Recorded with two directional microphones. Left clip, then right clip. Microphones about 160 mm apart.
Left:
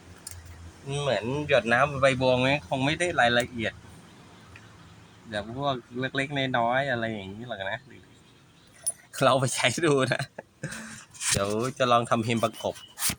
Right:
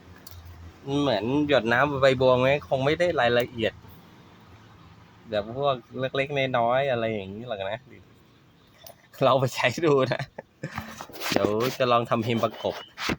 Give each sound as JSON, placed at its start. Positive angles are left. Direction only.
{"t": 0.9, "sound": "speech", "side_deg": -50}
{"t": 5.3, "sound": "speech", "side_deg": -35}
{"t": 9.1, "sound": "speech", "side_deg": -15}